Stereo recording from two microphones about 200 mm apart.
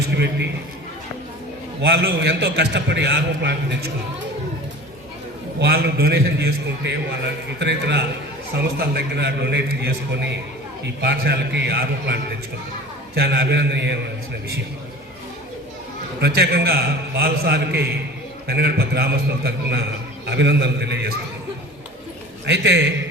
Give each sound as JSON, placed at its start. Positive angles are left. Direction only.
{"t": 1.8, "sound": "a man's voice", "side_deg": -60}
{"t": 5.5, "sound": "a man's voice", "side_deg": -55}
{"t": 16.2, "sound": "a man's voice", "side_deg": -55}
{"t": 22.4, "sound": "a man's voice", "side_deg": -60}